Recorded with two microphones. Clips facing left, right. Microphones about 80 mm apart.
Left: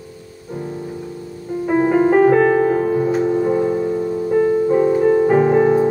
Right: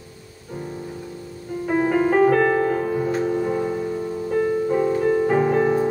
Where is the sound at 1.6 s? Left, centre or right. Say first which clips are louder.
Left 5 dB; centre.